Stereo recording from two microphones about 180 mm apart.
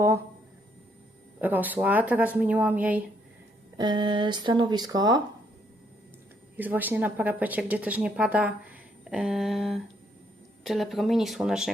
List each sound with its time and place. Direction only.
1.4 s speech: 10° right (ahead or behind)
3.8 s speech: 25° right (ahead or behind)
6.6 s speech: 10° right (ahead or behind)